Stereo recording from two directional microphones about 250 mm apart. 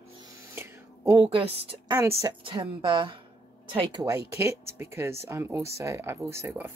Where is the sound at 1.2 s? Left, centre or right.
Right.